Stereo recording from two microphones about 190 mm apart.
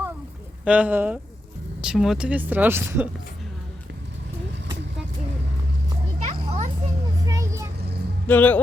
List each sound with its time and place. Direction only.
0.6 s speech: 5° right (ahead or behind)
6.2 s children playing: 35° right (ahead or behind)
7.3 s vehicle: 15° right (ahead or behind)
8.3 s speech: 10° left (ahead or behind)